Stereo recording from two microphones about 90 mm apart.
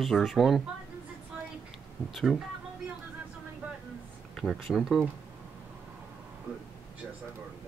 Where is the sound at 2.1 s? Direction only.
5° left (ahead or behind).